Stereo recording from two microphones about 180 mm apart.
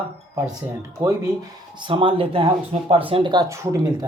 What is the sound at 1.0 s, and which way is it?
Speech, 20° right (ahead or behind).